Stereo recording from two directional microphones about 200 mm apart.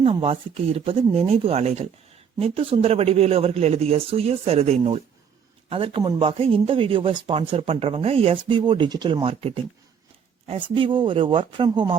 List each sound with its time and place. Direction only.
0.0 s speech: 25° right (ahead or behind)